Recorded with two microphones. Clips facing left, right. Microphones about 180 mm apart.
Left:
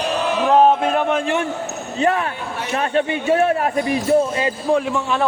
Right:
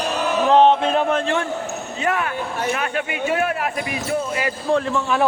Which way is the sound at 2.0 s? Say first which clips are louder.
Left 4 dB; 30° left (ahead or behind).